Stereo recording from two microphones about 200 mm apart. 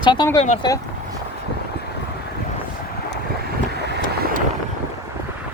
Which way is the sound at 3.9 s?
55° right (ahead or behind).